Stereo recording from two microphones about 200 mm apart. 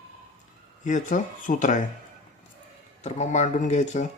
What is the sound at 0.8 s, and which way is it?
Speech, 40° left (ahead or behind).